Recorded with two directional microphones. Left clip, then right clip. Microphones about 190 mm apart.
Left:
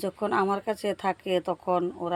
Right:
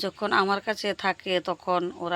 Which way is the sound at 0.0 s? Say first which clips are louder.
Right 2 dB; 5° left (ahead or behind).